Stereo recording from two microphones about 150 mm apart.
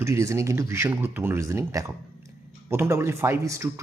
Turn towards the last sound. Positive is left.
turn(degrees=-20)  # may be behind; listen again after turning